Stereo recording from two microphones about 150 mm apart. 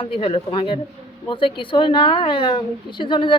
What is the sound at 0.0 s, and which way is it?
Speech, 35° left (ahead or behind).